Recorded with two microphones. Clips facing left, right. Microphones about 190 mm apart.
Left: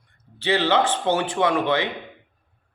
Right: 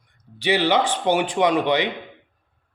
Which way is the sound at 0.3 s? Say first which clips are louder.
Right 1 dB; 15° right (ahead or behind).